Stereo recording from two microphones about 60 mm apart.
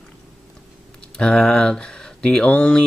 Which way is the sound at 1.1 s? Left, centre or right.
Centre.